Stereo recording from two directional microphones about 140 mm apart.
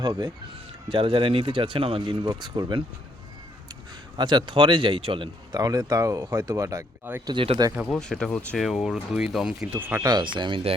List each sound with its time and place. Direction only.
0.0 s speech: 30° right (ahead or behind)
4.2 s speech: 35° right (ahead or behind)
5.5 s speech: 25° right (ahead or behind)
7.3 s speech: 40° right (ahead or behind)
7.9 s speech: 5° left (ahead or behind)
9.7 s speech: 25° right (ahead or behind); by 10.8 s 40° right (ahead or behind)